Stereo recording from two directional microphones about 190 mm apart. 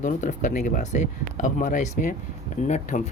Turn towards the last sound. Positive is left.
turn(degrees=40)  # may be behind; listen again after turning